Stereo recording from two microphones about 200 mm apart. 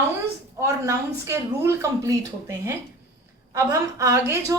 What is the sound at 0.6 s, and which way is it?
A woman's voice, 15° right (ahead or behind).